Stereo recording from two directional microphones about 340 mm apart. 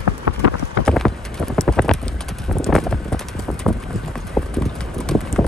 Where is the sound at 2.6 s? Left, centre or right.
Centre.